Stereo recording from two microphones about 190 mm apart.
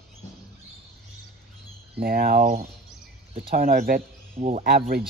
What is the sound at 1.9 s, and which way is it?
Speech, 50° right (ahead or behind).